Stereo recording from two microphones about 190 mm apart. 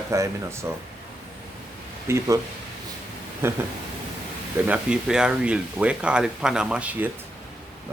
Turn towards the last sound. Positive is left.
turn(degrees=-10)  # may be behind; listen again after turning